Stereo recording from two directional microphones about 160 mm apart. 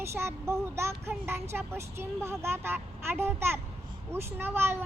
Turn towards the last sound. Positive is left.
turn(degrees=-15)  # may be behind; listen again after turning